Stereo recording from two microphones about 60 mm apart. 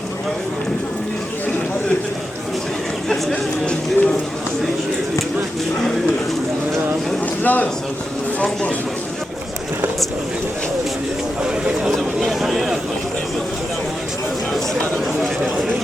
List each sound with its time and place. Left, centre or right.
3.1 s speech: centre
7.4 s speech: left
11.8 s a sound: centre